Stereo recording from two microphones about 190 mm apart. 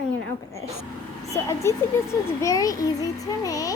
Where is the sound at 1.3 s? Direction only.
15° left (ahead or behind).